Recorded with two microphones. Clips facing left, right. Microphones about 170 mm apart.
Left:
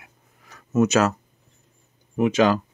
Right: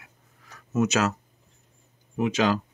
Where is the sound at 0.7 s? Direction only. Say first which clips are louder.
Left 5 dB; 50° left (ahead or behind).